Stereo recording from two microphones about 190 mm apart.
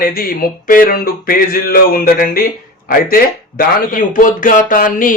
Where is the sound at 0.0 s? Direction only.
50° left (ahead or behind).